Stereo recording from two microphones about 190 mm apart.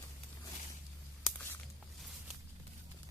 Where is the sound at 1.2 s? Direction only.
10° left (ahead or behind).